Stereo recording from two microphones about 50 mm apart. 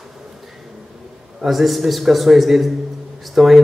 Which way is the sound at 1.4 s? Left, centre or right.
Centre.